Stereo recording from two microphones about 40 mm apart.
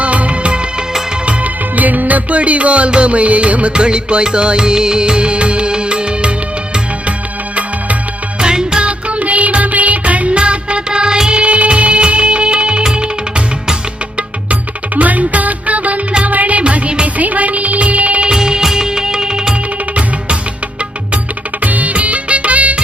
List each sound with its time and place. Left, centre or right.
0.0 s music of bollywood: right
1.7 s music: right
8.4 s music of bollywood: centre
8.9 s music: right
14.9 s music: right
17.2 s music: right
18.3 s music: centre
21.6 s music: right